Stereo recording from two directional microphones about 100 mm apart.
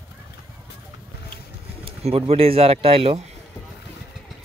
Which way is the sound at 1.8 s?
80° right.